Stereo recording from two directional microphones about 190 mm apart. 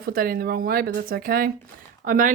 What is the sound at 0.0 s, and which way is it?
Speech, 50° right (ahead or behind).